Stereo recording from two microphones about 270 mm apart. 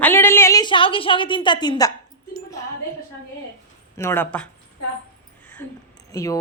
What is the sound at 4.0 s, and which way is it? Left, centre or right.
Speech, centre.